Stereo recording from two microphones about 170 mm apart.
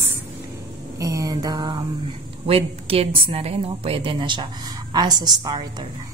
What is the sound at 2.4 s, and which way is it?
A woman's voice, 35° right (ahead or behind).